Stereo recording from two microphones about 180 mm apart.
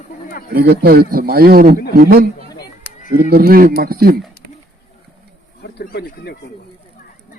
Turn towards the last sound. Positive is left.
turn(degrees=60)  # may be behind; listen again after turning